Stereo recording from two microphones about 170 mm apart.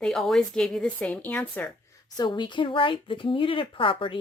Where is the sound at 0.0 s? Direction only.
Centre (ahead or behind).